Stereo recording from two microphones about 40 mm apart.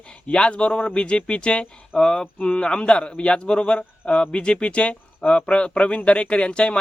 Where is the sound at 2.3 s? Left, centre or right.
Left.